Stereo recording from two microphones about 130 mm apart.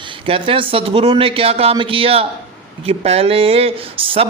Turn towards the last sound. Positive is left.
turn(degrees=-45)  # may be behind; listen again after turning